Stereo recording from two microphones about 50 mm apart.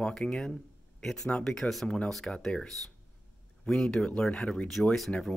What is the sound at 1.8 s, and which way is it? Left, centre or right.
Speech, left.